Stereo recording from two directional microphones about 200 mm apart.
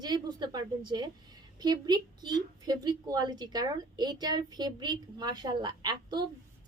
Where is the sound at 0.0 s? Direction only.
20° right (ahead or behind).